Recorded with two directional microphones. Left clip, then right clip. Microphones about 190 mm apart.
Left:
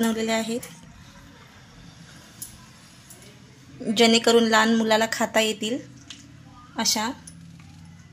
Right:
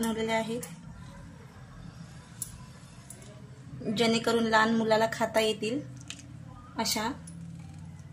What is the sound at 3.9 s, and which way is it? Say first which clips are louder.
A woman's voice: left 9 dB; 45° left (ahead or behind).